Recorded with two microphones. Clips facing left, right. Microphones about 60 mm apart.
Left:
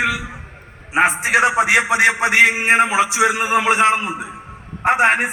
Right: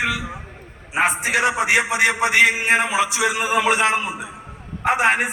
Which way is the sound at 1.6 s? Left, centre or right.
Left.